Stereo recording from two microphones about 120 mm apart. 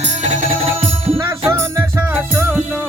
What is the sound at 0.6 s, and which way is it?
Music, 55° right (ahead or behind).